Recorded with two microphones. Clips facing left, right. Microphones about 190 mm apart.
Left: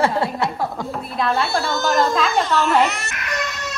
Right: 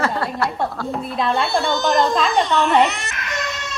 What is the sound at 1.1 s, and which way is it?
Speech, centre (ahead or behind).